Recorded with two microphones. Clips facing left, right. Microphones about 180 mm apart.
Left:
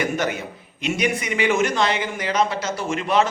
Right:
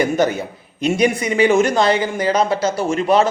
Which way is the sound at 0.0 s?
35° right (ahead or behind).